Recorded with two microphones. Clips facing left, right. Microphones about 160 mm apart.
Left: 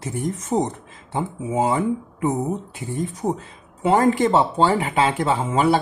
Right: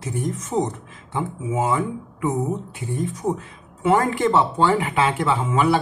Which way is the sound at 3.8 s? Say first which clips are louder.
Left 2 dB; 30° left (ahead or behind).